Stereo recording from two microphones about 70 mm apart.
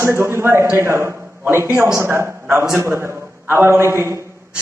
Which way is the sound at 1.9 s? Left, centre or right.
Right.